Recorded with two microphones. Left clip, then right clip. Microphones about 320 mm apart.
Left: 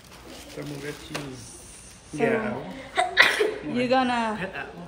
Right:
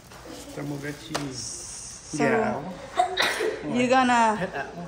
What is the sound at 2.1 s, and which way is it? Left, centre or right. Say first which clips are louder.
Speech: right 1 dB; right.